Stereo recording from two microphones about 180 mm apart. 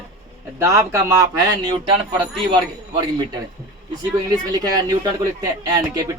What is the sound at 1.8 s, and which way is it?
Speech, 30° right (ahead or behind).